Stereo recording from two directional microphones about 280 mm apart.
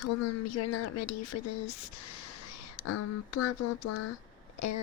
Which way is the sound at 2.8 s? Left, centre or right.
Left.